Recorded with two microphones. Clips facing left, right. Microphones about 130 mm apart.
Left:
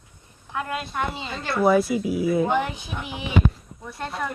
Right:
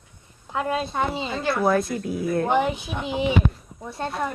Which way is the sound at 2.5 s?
20° right (ahead or behind).